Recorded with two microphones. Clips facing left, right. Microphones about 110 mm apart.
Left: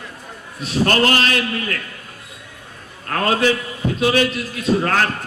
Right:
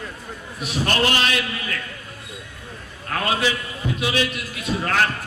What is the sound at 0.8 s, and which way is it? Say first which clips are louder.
Speech: left 4 dB; 45° left (ahead or behind).